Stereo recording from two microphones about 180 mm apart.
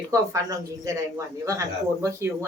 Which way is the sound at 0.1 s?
15° right (ahead or behind).